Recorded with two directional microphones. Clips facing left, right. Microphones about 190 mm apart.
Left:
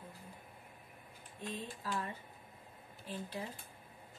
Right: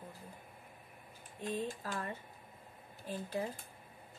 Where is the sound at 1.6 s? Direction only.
50° right (ahead or behind).